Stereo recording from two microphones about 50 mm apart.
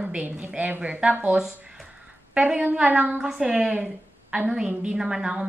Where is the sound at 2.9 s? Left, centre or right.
Right.